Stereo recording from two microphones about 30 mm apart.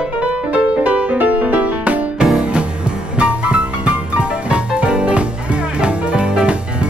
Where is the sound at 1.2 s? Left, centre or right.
Right.